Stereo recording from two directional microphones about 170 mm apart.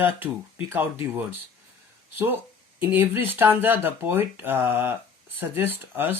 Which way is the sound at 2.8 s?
10° right (ahead or behind).